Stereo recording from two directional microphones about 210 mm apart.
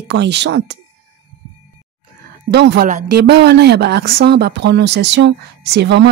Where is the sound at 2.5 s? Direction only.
55° right (ahead or behind).